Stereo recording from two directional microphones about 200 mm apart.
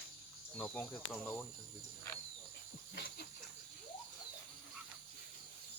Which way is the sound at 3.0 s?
50° left (ahead or behind).